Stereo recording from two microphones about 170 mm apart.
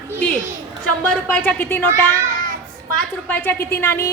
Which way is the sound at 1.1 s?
10° left (ahead or behind).